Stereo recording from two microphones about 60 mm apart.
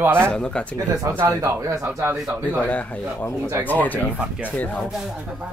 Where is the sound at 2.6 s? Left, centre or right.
Left.